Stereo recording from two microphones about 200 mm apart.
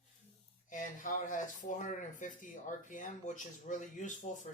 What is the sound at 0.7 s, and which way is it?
Speech, 40° left (ahead or behind).